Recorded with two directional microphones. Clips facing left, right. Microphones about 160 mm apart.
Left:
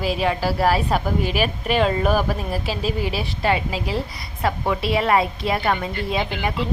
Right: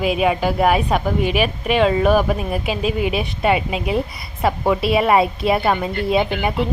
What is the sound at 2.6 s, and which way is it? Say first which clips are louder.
Speech: right 4 dB; 35° left (ahead or behind).